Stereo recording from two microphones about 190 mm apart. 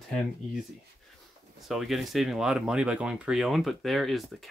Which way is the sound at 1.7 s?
Centre (ahead or behind).